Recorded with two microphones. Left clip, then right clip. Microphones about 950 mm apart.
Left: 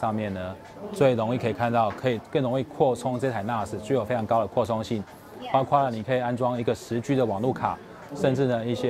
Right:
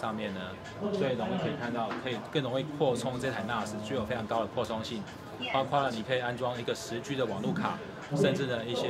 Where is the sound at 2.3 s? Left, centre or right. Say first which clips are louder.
Left 3 dB; left.